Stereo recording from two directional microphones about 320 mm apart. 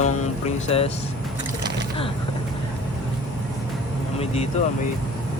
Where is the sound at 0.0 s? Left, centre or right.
Left.